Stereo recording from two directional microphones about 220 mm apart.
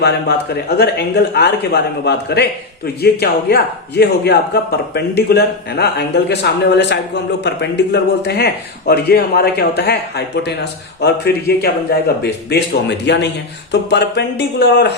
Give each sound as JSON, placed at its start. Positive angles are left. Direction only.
{"t": 0.0, "sound": "speech", "side_deg": 45}